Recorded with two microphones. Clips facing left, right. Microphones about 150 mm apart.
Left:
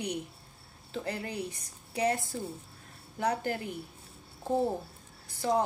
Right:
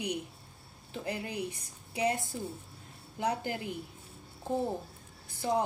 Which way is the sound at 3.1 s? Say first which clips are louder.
Left 2 dB; 15° right (ahead or behind).